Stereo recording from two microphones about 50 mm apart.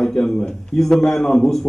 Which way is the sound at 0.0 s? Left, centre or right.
Centre.